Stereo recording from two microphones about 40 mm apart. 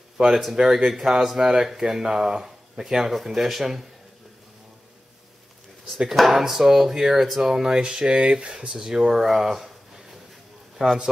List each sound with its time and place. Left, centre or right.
0.3 s speech: centre
6.1 s speech: centre
10.8 s a man's voice: right